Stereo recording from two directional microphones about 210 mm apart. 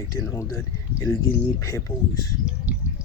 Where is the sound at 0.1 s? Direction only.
15° left (ahead or behind).